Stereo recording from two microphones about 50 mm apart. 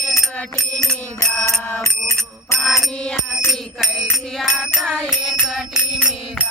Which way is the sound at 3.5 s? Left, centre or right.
Centre.